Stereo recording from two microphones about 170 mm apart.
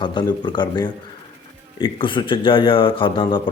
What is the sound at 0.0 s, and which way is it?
A man's voice, 25° left (ahead or behind).